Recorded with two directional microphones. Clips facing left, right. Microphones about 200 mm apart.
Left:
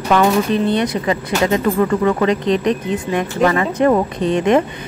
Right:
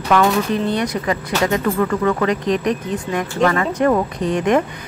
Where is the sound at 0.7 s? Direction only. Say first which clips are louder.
Left 3 dB; 25° left (ahead or behind).